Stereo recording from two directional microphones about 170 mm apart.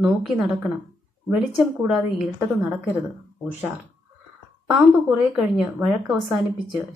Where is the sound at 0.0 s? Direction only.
5° right (ahead or behind).